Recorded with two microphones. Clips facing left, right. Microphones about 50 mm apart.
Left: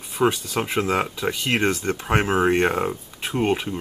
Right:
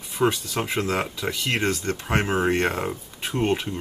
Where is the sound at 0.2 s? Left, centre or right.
Centre.